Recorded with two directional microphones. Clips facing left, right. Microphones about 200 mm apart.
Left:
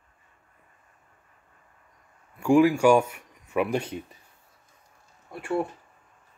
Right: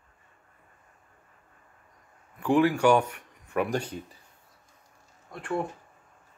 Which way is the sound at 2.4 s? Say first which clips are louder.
Left 3 dB; 10° left (ahead or behind).